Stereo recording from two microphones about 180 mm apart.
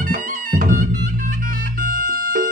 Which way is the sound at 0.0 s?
50° right (ahead or behind).